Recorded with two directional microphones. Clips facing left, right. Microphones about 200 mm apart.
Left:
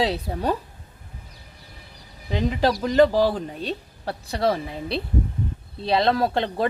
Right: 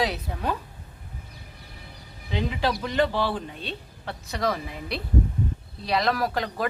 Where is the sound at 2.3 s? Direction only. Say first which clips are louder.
Left 5 dB; 45° left (ahead or behind).